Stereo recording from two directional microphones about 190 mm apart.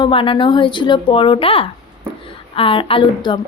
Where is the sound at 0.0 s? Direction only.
25° left (ahead or behind).